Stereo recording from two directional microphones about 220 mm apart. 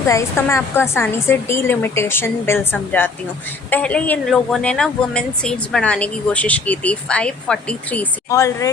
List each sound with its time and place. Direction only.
0.1 s a woman's voice: 15° left (ahead or behind)